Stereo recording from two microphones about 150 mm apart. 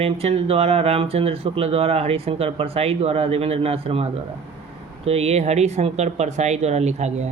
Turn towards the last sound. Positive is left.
turn(degrees=-50)  # may be behind; listen again after turning